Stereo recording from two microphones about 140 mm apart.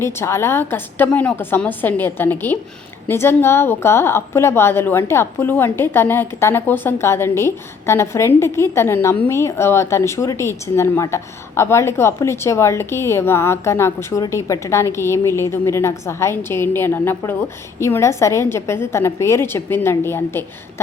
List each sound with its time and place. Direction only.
0.0 s a woman's voice: 20° left (ahead or behind)